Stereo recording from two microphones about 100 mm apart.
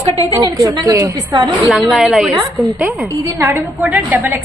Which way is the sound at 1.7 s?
Centre (ahead or behind).